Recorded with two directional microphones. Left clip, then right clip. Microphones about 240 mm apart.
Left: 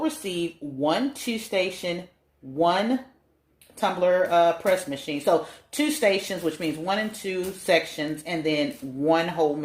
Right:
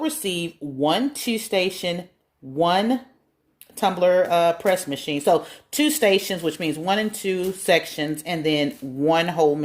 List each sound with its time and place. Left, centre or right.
0.0 s speech: right